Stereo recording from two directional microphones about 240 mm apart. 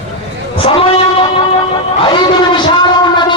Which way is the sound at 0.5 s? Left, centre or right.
Left.